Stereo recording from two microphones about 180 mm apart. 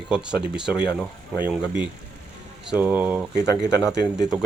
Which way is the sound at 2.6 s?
10° right (ahead or behind).